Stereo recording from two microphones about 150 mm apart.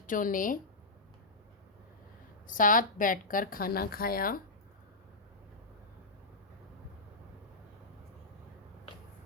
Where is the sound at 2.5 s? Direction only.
65° left (ahead or behind).